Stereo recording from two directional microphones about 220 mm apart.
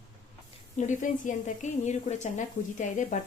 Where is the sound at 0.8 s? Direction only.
35° left (ahead or behind).